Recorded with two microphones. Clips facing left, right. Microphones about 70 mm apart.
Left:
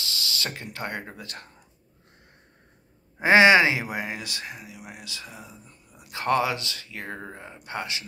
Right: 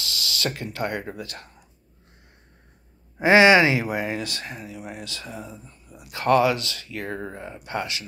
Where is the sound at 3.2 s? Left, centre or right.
Left; by 5.2 s centre.